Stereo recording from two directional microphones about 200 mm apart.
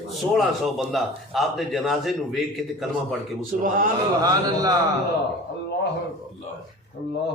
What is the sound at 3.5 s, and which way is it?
Speech, 45° right (ahead or behind).